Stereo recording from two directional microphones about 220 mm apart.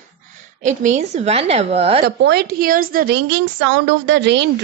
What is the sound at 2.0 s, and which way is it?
A woman's voice, 50° right (ahead or behind).